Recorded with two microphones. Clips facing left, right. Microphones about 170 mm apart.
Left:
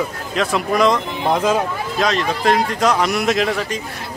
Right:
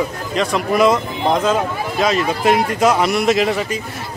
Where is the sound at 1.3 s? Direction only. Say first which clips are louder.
Even; 10° left (ahead or behind).